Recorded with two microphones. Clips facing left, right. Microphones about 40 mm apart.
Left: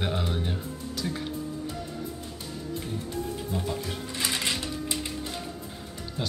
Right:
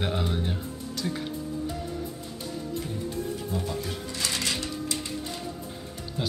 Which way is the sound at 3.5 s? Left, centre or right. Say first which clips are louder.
Even; centre.